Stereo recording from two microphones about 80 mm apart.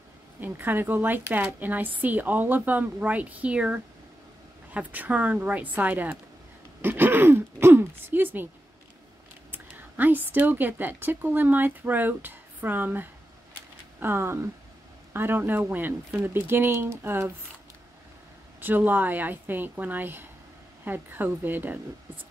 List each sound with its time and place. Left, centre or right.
0.4 s a woman's voice: right
9.5 s a woman's voice: right
18.6 s a woman's voice: right